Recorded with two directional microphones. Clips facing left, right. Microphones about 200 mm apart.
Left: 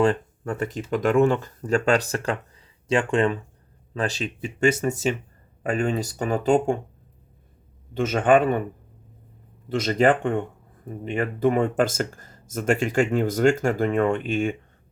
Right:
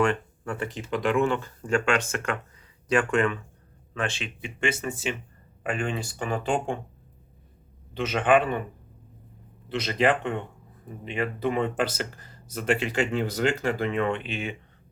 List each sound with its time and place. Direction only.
0.0 s speech: 35° left (ahead or behind)
7.9 s speech: 45° left (ahead or behind)
9.6 s speech: 45° left (ahead or behind)